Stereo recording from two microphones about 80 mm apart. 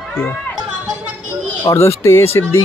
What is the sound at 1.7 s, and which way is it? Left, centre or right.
Speech, left.